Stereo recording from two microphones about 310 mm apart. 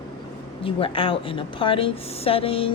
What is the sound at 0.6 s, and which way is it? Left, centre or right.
A woman's voice, centre.